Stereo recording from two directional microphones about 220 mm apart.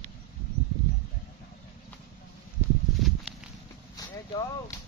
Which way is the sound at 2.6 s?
10° right (ahead or behind).